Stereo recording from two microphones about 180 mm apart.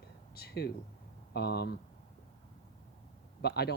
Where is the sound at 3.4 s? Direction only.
65° left (ahead or behind).